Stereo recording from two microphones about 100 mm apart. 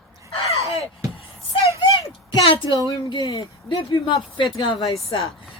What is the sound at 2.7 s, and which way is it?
Speech, 35° right (ahead or behind).